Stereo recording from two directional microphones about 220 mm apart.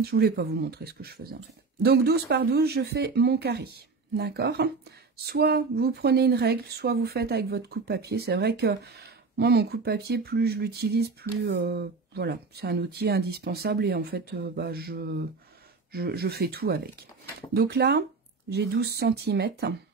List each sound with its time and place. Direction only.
0.0 s speech: 45° right (ahead or behind)